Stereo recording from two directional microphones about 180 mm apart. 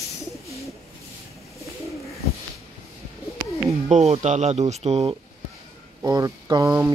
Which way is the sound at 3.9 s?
35° right (ahead or behind).